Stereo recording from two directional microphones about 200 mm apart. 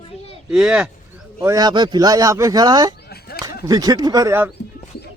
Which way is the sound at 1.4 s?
20° right (ahead or behind).